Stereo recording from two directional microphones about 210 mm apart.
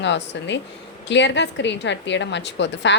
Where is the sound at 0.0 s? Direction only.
60° left (ahead or behind).